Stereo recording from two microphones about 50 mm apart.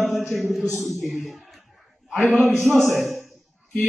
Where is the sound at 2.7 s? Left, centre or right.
Centre.